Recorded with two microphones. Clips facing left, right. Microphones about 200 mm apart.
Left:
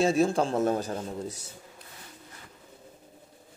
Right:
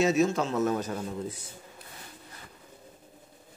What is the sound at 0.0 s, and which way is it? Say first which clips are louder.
A man's voice: left 1 dB; 30° left (ahead or behind).